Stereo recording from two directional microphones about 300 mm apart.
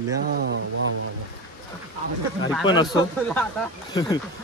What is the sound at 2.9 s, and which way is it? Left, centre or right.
Speech, centre.